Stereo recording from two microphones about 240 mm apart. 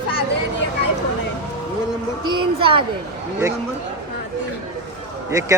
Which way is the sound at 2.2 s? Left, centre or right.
Centre.